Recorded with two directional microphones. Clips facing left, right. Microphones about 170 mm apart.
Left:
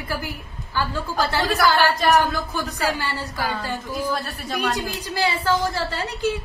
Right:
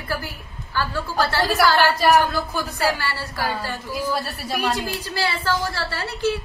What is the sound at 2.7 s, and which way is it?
A woman's voice, 20° left (ahead or behind).